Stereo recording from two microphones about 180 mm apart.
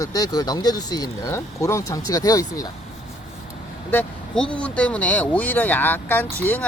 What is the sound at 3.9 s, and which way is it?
Speech, 10° left (ahead or behind).